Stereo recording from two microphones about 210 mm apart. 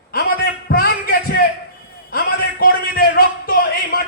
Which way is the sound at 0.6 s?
45° left (ahead or behind).